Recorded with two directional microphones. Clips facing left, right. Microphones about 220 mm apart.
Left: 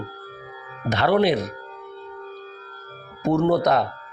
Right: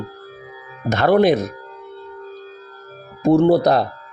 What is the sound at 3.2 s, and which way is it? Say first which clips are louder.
Speech: right 6 dB; 30° right (ahead or behind).